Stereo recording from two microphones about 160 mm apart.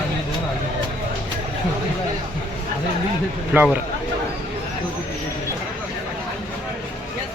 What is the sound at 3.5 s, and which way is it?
Speech, 10° right (ahead or behind).